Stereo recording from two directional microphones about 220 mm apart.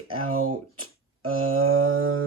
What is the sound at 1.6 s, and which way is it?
Mantra, 70° right (ahead or behind).